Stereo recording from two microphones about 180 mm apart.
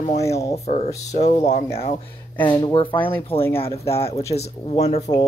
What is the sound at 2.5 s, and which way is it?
Speech, 20° left (ahead or behind).